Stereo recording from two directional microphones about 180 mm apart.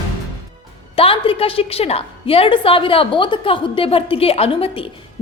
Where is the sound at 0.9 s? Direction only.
30° left (ahead or behind).